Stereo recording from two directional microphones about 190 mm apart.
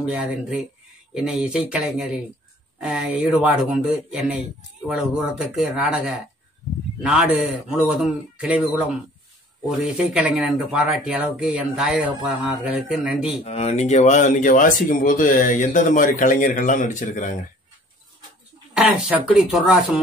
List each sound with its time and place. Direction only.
0.0 s speech: 5° right (ahead or behind)
13.4 s speech: 35° left (ahead or behind)
18.7 s speech: 5° right (ahead or behind)